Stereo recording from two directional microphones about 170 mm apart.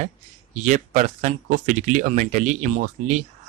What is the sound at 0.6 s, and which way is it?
Speech, 45° right (ahead or behind).